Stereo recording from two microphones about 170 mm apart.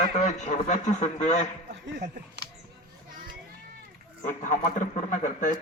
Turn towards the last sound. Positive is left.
turn(degrees=45)  # may be behind; listen again after turning